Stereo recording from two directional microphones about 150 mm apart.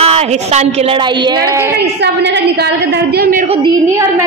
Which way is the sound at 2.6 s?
90° right.